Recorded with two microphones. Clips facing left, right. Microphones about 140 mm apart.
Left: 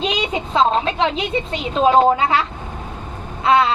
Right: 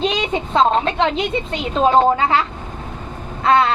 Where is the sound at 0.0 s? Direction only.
30° right (ahead or behind).